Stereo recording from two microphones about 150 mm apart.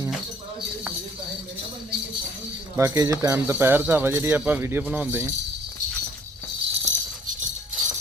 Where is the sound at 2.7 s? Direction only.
20° right (ahead or behind).